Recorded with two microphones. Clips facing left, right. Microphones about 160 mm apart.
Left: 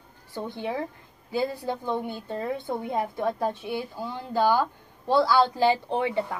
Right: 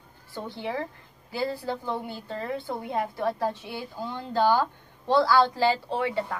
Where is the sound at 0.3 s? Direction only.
20° left (ahead or behind).